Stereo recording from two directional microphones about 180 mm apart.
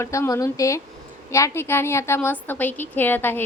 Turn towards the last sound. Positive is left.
turn(degrees=10)  # may be behind; listen again after turning